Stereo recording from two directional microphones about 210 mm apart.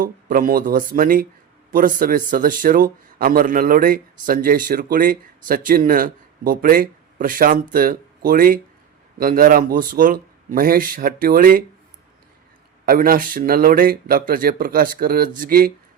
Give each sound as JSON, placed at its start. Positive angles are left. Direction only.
{"t": 0.0, "sound": "speech", "side_deg": -40}
{"t": 12.8, "sound": "speech", "side_deg": -45}